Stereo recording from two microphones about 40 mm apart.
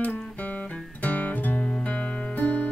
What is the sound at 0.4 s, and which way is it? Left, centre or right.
Guitar, left.